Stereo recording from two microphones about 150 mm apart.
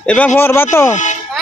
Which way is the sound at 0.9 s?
55° left (ahead or behind).